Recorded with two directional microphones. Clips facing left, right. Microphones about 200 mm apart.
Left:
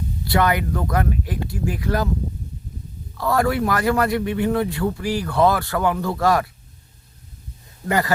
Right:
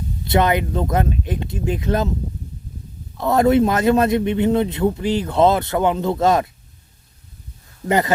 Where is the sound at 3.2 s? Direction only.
20° right (ahead or behind).